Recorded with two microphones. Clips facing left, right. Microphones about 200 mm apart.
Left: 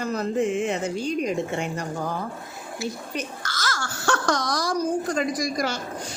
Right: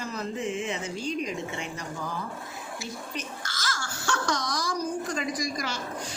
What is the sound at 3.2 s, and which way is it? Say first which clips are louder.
Babbling: left 5 dB; 70° left (ahead or behind).